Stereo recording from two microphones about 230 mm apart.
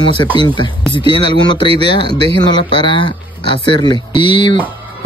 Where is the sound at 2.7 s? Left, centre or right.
Left.